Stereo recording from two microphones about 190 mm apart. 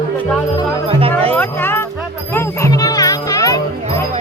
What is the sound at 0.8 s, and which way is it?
Music, 30° right (ahead or behind).